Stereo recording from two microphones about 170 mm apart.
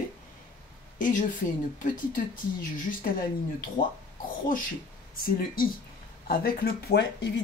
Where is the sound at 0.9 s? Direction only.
50° left (ahead or behind).